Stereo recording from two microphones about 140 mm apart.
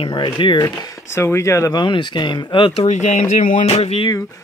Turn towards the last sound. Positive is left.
turn(degrees=25)  # may be behind; listen again after turning